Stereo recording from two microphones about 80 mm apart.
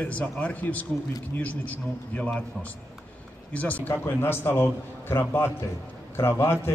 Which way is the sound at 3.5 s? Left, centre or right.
Centre.